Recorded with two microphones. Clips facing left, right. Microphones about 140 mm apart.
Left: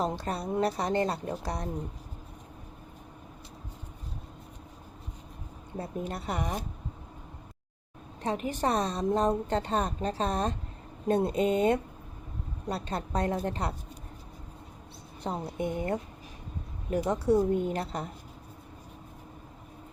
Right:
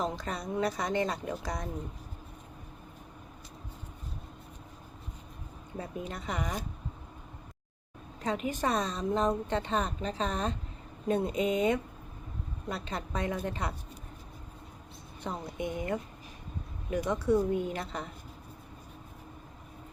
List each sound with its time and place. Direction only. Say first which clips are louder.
0.0 s a woman's voice: left 3 dB; 35° left (ahead or behind)
5.7 s a woman's voice: left 3 dB; 35° left (ahead or behind)
8.4 s a woman's voice: left 2 dB; 30° left (ahead or behind)
15.2 s a woman's voice: left 3 dB; 35° left (ahead or behind)